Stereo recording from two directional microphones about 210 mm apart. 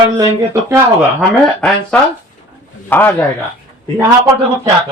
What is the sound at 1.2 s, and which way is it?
A man's voice, 5° left (ahead or behind).